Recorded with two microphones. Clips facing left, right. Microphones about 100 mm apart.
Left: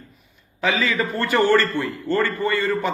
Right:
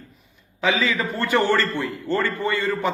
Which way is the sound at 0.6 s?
15° right (ahead or behind).